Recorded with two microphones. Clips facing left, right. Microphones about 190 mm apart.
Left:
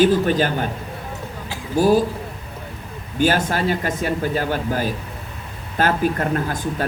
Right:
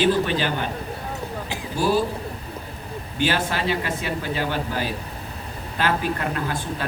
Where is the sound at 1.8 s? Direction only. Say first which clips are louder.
Left 6 dB; 45° left (ahead or behind).